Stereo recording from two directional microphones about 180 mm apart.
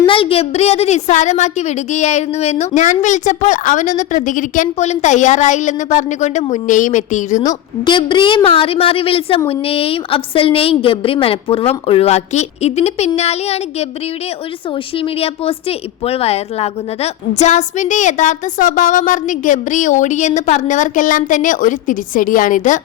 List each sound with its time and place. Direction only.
0.0 s a woman's voice: 30° left (ahead or behind)
7.4 s a woman's voice: 25° left (ahead or behind)
14.9 s a woman's voice: 30° left (ahead or behind); by 22.8 s 45° left (ahead or behind)